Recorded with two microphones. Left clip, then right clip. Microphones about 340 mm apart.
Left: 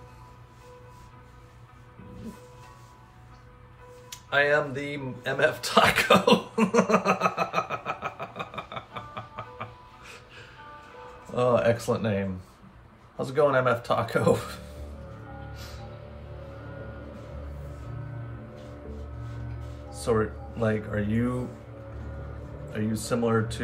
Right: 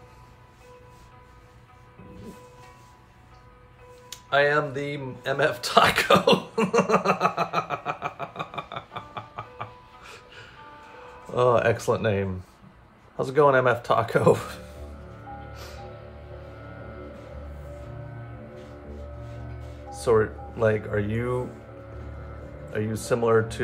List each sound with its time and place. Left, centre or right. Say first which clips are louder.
4.1 s music: right 2 dB; centre
11.3 s speech: right 2 dB; centre
19.9 s speech: right 5 dB; centre
22.7 s speech: right 4 dB; centre